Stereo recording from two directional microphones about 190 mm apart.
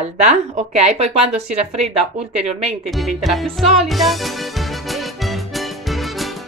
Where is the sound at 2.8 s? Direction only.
Centre (ahead or behind).